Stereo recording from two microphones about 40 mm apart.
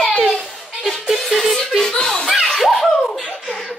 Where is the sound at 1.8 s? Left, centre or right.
Centre.